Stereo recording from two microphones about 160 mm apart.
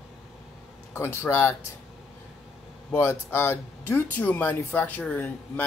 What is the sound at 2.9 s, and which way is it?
Speech, 15° left (ahead or behind).